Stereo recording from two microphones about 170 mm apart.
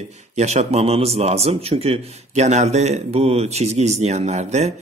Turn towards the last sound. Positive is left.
turn(degrees=-40)  # may be behind; listen again after turning